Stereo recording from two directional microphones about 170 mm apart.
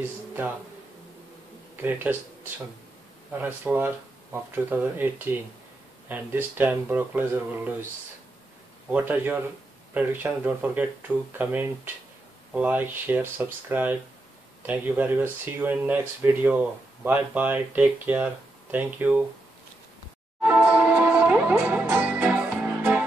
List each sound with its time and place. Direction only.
1.8 s speech: 10° right (ahead or behind)
3.3 s speech: 10° right (ahead or behind)
8.9 s speech: 10° right (ahead or behind)
20.4 s music: 5° right (ahead or behind)